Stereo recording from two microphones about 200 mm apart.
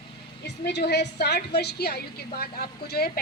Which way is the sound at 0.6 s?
55° left (ahead or behind).